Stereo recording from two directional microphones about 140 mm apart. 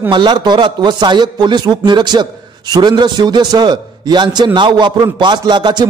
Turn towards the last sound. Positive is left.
turn(degrees=-30)  # may be behind; listen again after turning